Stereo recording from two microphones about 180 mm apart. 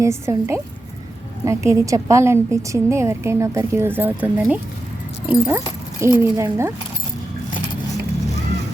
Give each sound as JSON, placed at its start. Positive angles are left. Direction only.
{"t": 0.0, "sound": "a woman's voice", "side_deg": -15}